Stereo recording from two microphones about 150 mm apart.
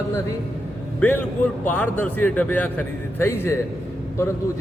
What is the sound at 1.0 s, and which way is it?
A man's voice, 15° left (ahead or behind).